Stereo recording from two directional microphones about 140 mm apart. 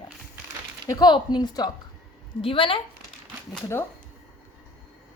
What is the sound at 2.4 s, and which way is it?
Speech, 40° left (ahead or behind).